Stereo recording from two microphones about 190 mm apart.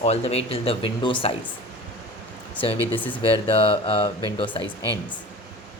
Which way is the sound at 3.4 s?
30° left (ahead or behind).